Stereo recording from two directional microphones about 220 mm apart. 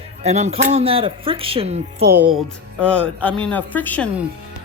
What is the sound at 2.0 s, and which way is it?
Speech, 45° right (ahead or behind).